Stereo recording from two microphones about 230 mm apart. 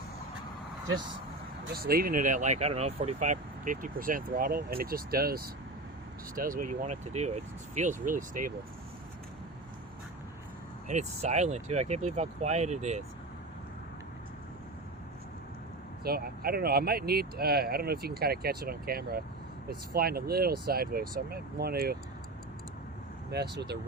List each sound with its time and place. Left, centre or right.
1.7 s speech: right
10.8 s speech: right
16.0 s speech: right
23.3 s speech: right